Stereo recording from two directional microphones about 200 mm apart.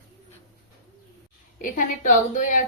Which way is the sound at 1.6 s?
40° left (ahead or behind).